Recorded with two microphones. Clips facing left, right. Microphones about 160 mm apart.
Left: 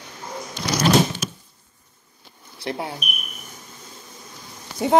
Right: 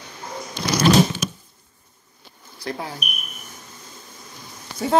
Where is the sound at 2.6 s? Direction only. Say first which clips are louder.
Left 2 dB; 25° left (ahead or behind).